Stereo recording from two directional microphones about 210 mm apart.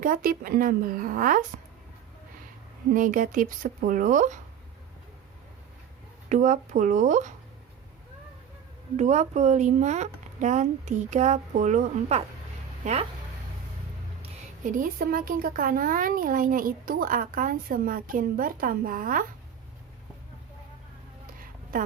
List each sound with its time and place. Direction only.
0.0 s speech: 40° right (ahead or behind)
2.9 s speech: 40° right (ahead or behind)
6.2 s speech: 35° right (ahead or behind)
9.0 s speech: 35° right (ahead or behind)
14.6 s speech: 40° right (ahead or behind)